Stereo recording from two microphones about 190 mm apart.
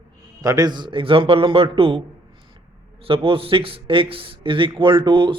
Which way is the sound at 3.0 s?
30° right (ahead or behind).